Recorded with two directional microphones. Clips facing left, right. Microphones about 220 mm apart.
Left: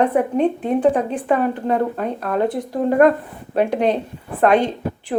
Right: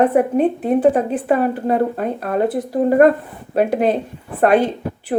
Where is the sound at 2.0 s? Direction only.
45° right (ahead or behind).